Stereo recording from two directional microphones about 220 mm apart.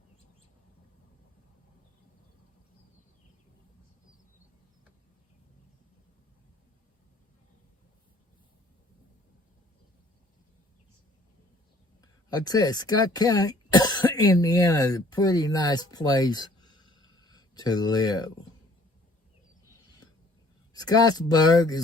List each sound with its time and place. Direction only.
12.3 s speech: 15° left (ahead or behind)
20.7 s speech: 20° left (ahead or behind)